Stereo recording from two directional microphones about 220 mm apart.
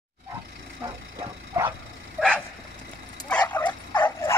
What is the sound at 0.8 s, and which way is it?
Bow-wow, 20° right (ahead or behind).